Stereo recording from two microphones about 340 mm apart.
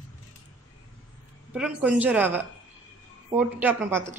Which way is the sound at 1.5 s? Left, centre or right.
Centre.